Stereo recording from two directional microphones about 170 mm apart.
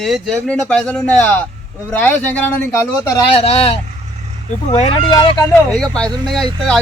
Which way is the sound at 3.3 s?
35° left (ahead or behind).